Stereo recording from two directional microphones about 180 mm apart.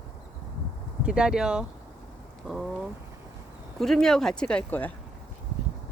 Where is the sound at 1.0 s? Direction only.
5° right (ahead or behind).